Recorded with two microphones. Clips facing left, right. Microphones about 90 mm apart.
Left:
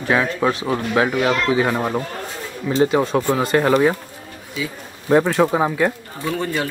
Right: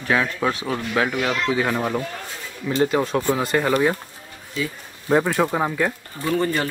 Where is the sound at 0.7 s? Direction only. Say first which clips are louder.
Left 4 dB; 20° left (ahead or behind); by 3.2 s 5° left (ahead or behind).